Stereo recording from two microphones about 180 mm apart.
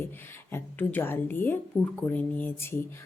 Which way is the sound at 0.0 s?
10° left (ahead or behind).